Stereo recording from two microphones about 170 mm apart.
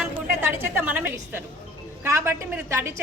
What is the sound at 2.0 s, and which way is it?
Speech, 15° right (ahead or behind).